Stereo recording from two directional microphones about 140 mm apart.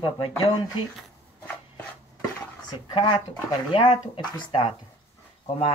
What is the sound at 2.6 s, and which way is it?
Speech, 30° left (ahead or behind).